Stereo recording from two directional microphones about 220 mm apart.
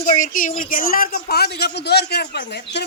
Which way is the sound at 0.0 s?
35° left (ahead or behind).